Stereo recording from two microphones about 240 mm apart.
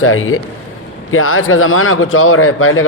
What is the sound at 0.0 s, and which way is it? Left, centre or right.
Speech, left.